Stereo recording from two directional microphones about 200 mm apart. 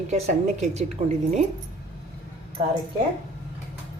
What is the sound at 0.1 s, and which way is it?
A woman's voice, 35° right (ahead or behind).